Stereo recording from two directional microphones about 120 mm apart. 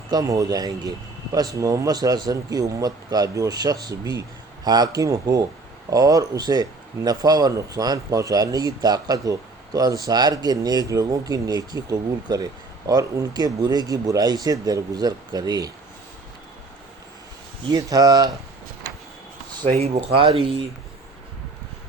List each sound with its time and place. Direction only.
0.1 s speech: 30° right (ahead or behind)
17.7 s speech: 30° right (ahead or behind)
19.6 s speech: 60° right (ahead or behind)